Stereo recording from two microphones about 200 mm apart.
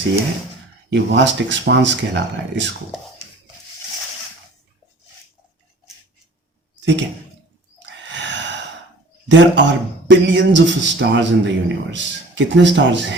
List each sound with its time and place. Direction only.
0.9 s a man's voice: 60° right (ahead or behind)
6.7 s a sound: 60° right (ahead or behind)
7.8 s wild animals: 65° right (ahead or behind)
9.3 s a man's voice: 65° right (ahead or behind)